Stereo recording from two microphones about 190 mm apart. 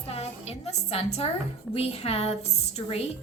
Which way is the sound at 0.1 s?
35° left (ahead or behind).